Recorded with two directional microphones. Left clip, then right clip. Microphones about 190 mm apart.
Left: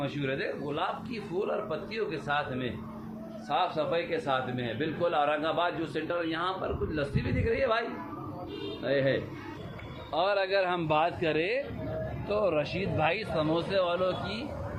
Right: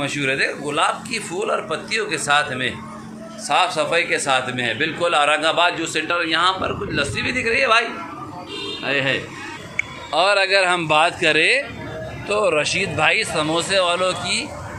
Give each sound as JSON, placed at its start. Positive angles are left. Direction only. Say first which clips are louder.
{"t": 0.0, "sound": "a man's voice", "louder": "right 12 dB", "side_deg": -10}
{"t": 10.1, "sound": "speech", "louder": "right 11 dB", "side_deg": -20}